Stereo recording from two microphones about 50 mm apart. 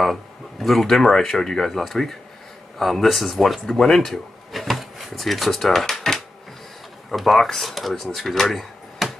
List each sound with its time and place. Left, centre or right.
0.0 s speech: centre